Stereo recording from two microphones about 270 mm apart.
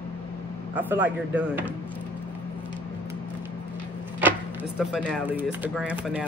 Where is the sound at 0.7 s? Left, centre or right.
Centre.